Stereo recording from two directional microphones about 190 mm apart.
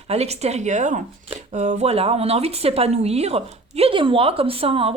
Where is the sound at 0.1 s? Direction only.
35° right (ahead or behind).